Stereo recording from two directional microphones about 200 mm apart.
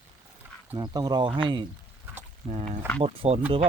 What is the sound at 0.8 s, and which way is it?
Speech, 20° right (ahead or behind).